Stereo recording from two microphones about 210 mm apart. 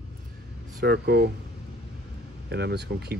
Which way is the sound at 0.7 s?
50° right (ahead or behind).